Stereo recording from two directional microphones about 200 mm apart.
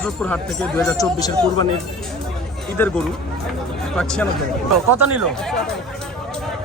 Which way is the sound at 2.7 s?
10° left (ahead or behind).